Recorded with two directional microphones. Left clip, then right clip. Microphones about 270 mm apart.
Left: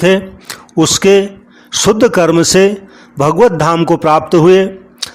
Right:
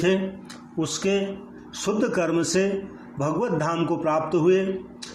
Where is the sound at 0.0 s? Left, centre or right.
Left.